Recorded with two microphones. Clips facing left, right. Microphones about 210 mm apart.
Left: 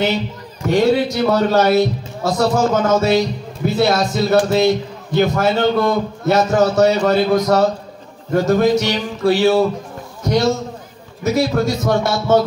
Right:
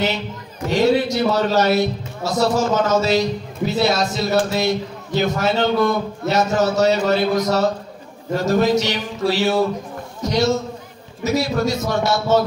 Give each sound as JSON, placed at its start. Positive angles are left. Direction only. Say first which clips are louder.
{"t": 0.7, "sound": "a man's voice", "louder": "left 2 dB", "side_deg": 55}